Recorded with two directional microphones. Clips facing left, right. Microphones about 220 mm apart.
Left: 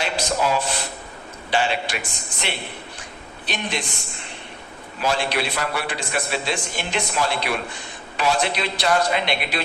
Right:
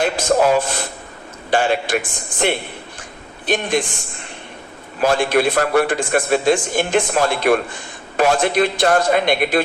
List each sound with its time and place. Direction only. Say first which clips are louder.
0.0 s a sound: right 7 dB; 50° right (ahead or behind)
1.5 s a man's voice: right 6 dB; 50° right (ahead or behind)
4.9 s a man's voice: right 7 dB; 50° right (ahead or behind)